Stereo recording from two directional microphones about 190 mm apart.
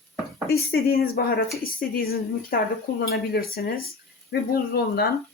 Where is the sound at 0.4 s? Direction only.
55° left (ahead or behind).